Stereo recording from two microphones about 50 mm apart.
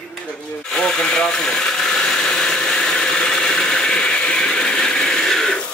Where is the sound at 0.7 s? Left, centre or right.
Centre.